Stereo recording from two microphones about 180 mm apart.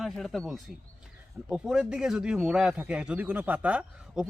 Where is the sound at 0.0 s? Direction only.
Centre (ahead or behind).